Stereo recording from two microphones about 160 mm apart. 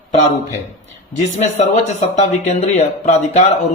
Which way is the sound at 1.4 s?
45° left (ahead or behind).